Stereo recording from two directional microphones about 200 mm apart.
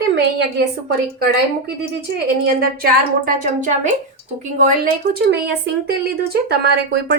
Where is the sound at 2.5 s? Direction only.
45° right (ahead or behind).